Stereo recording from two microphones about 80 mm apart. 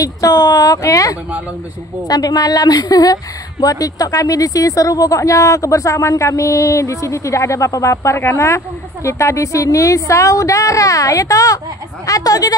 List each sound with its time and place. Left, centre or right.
0.0 s speech: left